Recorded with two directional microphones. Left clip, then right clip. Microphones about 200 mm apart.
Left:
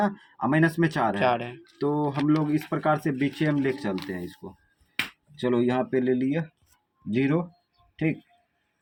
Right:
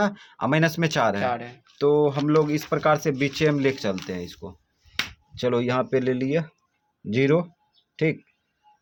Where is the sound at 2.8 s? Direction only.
55° right (ahead or behind).